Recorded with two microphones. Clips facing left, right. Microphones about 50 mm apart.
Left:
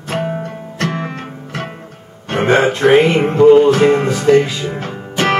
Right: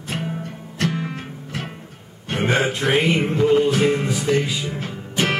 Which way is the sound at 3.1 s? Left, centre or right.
Left.